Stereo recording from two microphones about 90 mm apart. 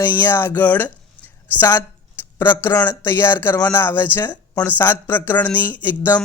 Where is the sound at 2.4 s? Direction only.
25° left (ahead or behind).